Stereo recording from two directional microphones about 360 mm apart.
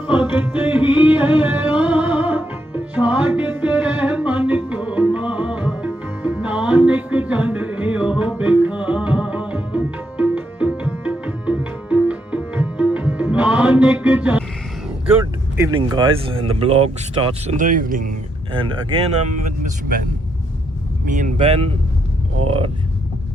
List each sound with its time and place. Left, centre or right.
0.3 s music: centre
14.8 s speech: centre
21.1 s speech: right